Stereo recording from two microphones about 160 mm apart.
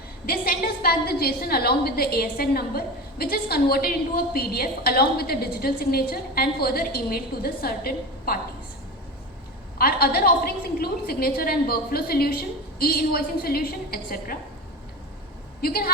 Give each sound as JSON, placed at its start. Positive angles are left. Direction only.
{"t": 0.3, "sound": "a woman's voice", "side_deg": 75}
{"t": 9.7, "sound": "a woman's voice", "side_deg": 70}
{"t": 15.6, "sound": "a woman's voice", "side_deg": 75}